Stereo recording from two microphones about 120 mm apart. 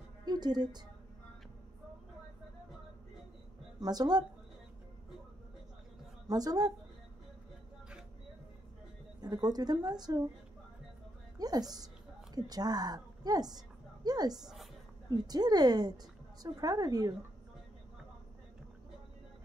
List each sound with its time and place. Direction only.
0.2 s a sound: 35° right (ahead or behind)
3.8 s a woman's voice: 35° right (ahead or behind)
6.2 s a woman's voice: 30° right (ahead or behind)
9.2 s a woman's voice: 35° right (ahead or behind)
11.3 s a woman's voice: 30° right (ahead or behind)